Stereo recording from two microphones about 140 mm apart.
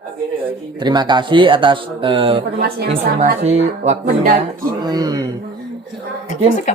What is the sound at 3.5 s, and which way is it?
Speech, 55° right (ahead or behind).